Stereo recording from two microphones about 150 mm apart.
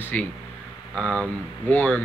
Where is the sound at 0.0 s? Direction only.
10° left (ahead or behind).